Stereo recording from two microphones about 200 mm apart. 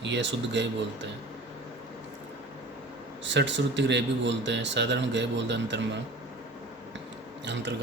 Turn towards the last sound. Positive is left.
turn(degrees=-60)  # may be behind; listen again after turning